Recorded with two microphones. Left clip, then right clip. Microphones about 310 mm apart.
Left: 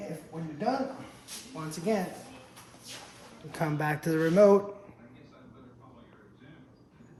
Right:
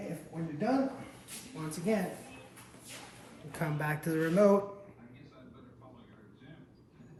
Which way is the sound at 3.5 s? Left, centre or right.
Left.